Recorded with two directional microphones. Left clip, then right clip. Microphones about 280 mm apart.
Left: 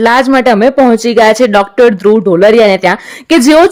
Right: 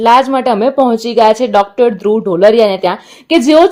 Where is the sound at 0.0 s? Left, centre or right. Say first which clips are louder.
Left 1 dB; left.